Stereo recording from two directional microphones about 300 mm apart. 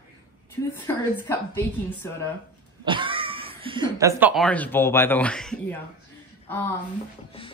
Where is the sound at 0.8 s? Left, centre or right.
Centre.